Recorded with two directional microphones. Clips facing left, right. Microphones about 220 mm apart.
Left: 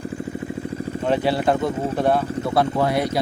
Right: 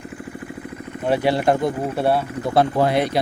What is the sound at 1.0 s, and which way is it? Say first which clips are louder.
Speech: right 2 dB; 10° right (ahead or behind).